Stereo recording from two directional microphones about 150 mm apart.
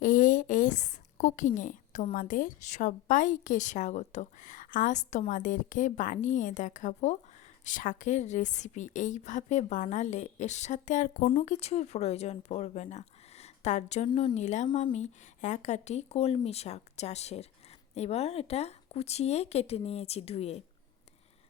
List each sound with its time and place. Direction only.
0.0 s a woman's voice: 60° left (ahead or behind)
14.1 s speech: 30° left (ahead or behind)
14.3 s a woman's voice: 50° left (ahead or behind)